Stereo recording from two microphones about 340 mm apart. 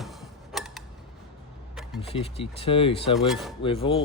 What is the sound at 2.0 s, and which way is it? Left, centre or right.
Speech, centre.